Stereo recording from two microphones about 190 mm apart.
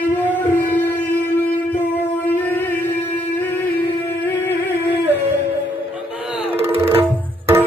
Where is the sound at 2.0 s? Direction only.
10° left (ahead or behind).